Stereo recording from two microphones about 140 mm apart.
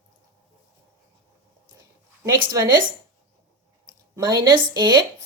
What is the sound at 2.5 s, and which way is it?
Speech, 30° right (ahead or behind).